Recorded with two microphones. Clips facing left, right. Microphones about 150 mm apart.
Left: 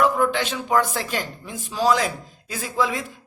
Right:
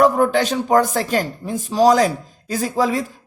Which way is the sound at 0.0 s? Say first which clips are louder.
Right 5 dB; 40° right (ahead or behind).